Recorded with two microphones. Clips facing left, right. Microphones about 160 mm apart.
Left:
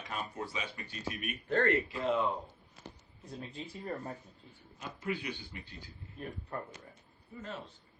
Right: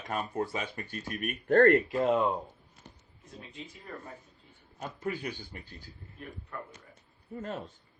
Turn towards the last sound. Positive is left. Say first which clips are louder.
# right 6 dB
turn(degrees=-50)  # may be behind; listen again after turning